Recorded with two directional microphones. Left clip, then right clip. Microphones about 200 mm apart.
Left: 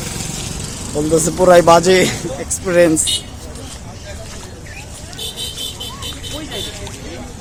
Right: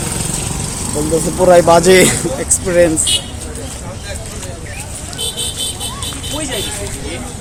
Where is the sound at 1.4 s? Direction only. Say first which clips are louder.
Right 1 dB; 25° left (ahead or behind).